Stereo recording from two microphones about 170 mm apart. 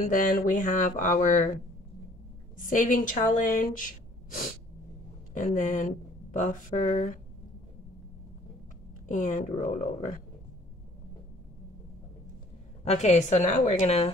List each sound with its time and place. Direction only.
0.1 s speech: 50° left (ahead or behind)
9.0 s speech: 50° left (ahead or behind)
12.8 s a woman's voice: 40° left (ahead or behind)